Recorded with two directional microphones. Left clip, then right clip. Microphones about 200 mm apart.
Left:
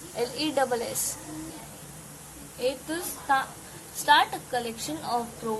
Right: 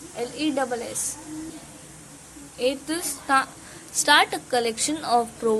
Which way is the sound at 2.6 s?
25° right (ahead or behind).